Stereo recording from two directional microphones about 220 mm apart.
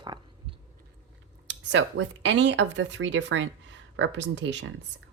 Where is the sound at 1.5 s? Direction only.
55° right (ahead or behind).